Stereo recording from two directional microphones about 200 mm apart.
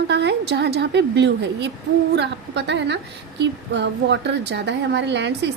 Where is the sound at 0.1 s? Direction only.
55° right (ahead or behind).